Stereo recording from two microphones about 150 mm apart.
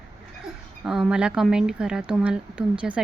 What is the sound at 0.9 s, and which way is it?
Speech, 5° right (ahead or behind).